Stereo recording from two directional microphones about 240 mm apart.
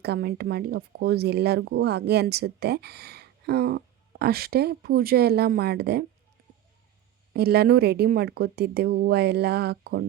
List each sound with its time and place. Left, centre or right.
0.0 s speech: right
7.3 s speech: right